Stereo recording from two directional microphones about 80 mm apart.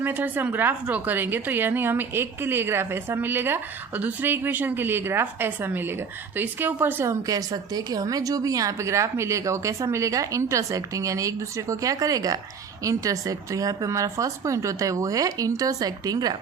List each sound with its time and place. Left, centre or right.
0.0 s a woman's voice: right
7.1 s a woman's voice: right